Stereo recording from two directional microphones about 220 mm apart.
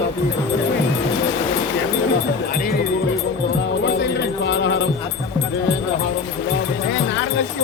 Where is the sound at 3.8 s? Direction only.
50° left (ahead or behind).